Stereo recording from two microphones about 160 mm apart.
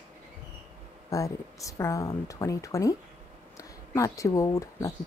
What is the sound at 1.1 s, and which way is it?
A woman's voice, 20° left (ahead or behind).